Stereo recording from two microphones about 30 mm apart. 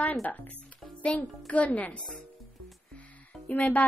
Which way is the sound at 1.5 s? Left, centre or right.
Left.